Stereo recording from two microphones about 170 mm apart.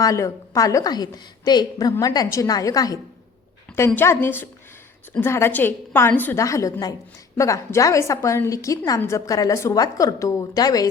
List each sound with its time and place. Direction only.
0.0 s a woman's voice: 20° left (ahead or behind)